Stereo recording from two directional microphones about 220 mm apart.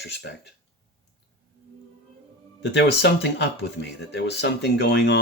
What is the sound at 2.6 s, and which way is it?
Speech, 50° left (ahead or behind).